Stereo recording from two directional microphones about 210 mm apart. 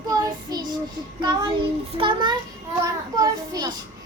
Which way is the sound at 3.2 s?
15° right (ahead or behind).